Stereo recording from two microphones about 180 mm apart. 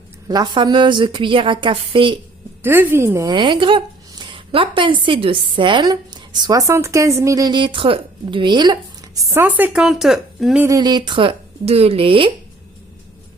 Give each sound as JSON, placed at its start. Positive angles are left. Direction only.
{"t": 0.3, "sound": "a woman's voice", "side_deg": -25}
{"t": 2.6, "sound": "a woman's voice", "side_deg": -10}
{"t": 3.3, "sound": "a woman's voice", "side_deg": -25}
{"t": 9.3, "sound": "speech", "side_deg": -10}
{"t": 10.6, "sound": "a woman's voice", "side_deg": -20}